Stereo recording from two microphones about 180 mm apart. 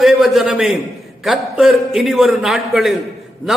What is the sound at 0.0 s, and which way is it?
A man's voice, centre (ahead or behind).